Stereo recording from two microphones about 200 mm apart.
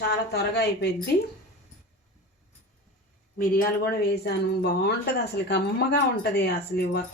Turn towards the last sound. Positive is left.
turn(degrees=50)  # may be behind; listen again after turning